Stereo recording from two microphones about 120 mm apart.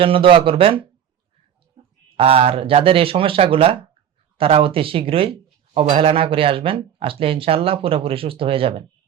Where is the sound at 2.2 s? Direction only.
55° right (ahead or behind).